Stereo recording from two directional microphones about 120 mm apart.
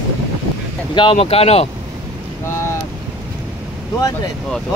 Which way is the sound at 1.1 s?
60° left (ahead or behind).